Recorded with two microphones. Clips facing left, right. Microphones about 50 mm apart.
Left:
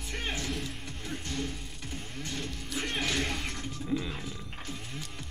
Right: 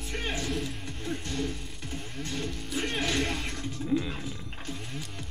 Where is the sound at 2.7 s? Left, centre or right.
Centre.